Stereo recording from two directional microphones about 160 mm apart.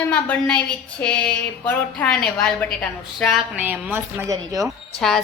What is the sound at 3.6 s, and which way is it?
Speech, 10° right (ahead or behind).